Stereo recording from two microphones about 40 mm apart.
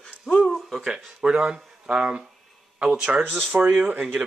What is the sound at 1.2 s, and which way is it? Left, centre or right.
Speech, right.